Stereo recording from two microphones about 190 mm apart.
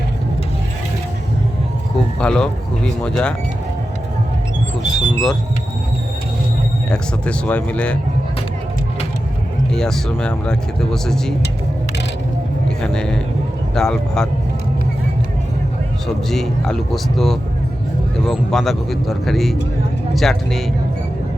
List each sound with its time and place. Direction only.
2.1 s speech: 5° left (ahead or behind)
4.8 s a sound: centre (ahead or behind)
6.9 s speech: 5° left (ahead or behind)
9.7 s speech: 5° left (ahead or behind)
12.8 s speech: 5° left (ahead or behind)
16.3 s speech: centre (ahead or behind)